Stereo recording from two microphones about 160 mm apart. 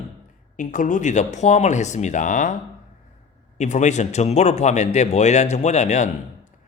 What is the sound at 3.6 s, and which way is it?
Speech, 45° left (ahead or behind).